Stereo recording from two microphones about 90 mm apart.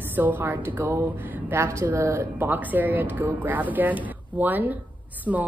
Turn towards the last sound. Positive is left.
turn(degrees=-10)  # may be behind; listen again after turning